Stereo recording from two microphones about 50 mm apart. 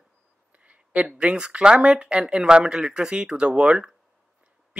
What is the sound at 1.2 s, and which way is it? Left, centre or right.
Speech, centre.